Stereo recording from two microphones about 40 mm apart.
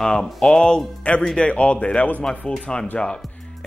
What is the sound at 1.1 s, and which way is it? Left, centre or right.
Speech, left.